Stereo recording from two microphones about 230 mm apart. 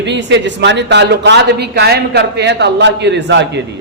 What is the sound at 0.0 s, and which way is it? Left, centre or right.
A man's voice, right.